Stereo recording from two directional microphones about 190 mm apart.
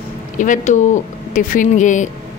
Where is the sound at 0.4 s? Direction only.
40° left (ahead or behind).